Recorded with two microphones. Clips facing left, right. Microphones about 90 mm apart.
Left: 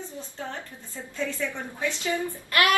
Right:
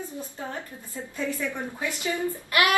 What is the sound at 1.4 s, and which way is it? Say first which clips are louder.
Speech: left 1 dB; 15° right (ahead or behind).